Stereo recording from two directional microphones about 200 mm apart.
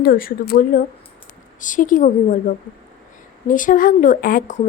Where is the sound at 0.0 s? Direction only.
45° left (ahead or behind).